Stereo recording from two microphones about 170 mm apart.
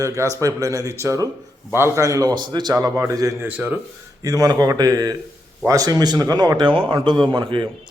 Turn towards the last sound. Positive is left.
turn(degrees=-30)  # may be behind; listen again after turning